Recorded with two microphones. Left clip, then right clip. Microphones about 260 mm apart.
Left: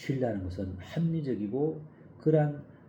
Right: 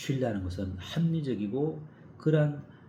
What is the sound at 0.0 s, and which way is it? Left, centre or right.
Speech, centre.